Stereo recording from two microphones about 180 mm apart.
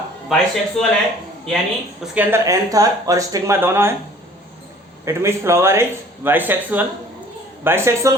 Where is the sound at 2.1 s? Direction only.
15° right (ahead or behind).